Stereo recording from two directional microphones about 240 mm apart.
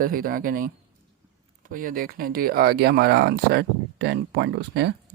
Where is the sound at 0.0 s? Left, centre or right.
Right.